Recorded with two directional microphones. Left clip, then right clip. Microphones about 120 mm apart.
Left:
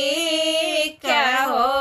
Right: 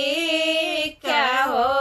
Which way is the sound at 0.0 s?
30° left (ahead or behind).